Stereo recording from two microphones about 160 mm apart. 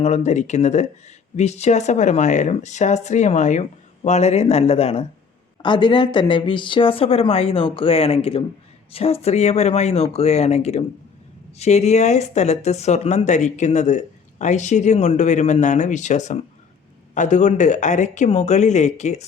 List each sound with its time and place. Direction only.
0.0 s a woman's voice: 45° left (ahead or behind)